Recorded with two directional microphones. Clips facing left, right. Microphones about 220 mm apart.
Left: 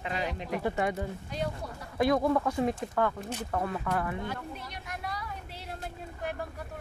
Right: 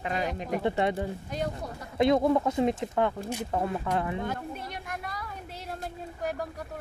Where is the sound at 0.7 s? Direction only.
30° right (ahead or behind).